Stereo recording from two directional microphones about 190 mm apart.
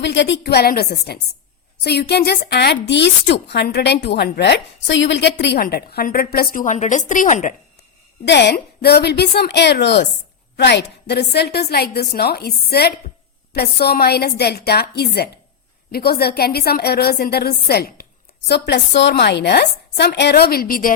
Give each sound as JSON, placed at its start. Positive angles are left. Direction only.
{"t": 0.0, "sound": "a woman's voice", "side_deg": 70}
{"t": 8.2, "sound": "a woman's voice", "side_deg": 65}